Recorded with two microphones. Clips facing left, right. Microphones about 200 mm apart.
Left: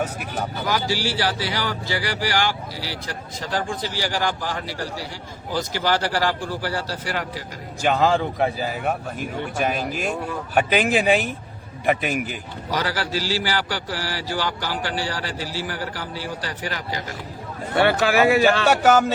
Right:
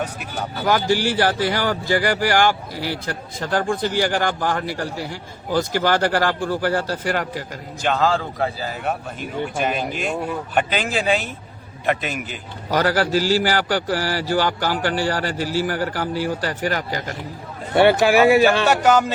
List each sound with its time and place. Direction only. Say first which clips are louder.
0.5 s a man's voice: right 7 dB; 50° right (ahead or behind)
7.8 s a man's voice: left 1 dB; 10° left (ahead or behind)
8.8 s a man's voice: even; 5° left (ahead or behind)
12.1 s a man's voice: left 4 dB; 50° left (ahead or behind)
12.7 s a man's voice: right 7 dB; 45° right (ahead or behind)
17.7 s speech: right 4 dB; 15° right (ahead or behind)
18.7 s speech: even; 5° left (ahead or behind)